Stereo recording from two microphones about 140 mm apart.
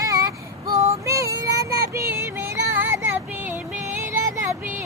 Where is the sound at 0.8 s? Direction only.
20° right (ahead or behind).